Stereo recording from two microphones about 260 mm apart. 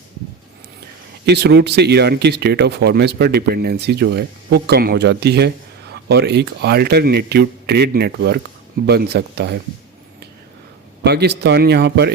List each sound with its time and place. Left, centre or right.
1.2 s speech: right
11.0 s speech: right